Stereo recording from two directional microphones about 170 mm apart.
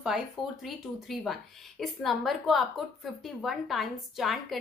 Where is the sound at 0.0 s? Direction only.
Centre (ahead or behind).